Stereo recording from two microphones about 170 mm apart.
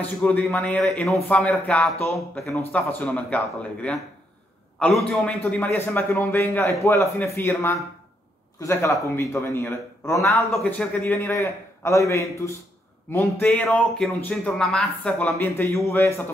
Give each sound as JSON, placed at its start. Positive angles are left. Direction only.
{"t": 0.0, "sound": "a man's voice", "side_deg": 10}
{"t": 10.4, "sound": "a man's voice", "side_deg": 5}